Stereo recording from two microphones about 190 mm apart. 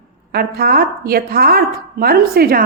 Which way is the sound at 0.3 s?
55° right (ahead or behind).